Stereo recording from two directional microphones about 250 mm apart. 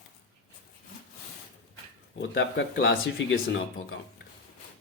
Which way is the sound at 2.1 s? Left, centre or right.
Left.